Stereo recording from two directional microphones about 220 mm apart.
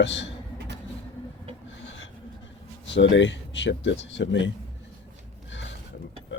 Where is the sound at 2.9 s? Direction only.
55° left (ahead or behind).